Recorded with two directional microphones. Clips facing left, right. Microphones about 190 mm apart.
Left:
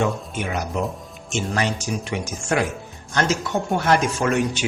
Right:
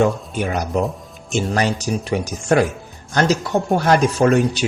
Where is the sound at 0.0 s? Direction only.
35° right (ahead or behind).